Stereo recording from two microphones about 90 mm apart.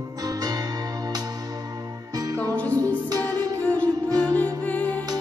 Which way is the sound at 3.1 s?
45° right (ahead or behind).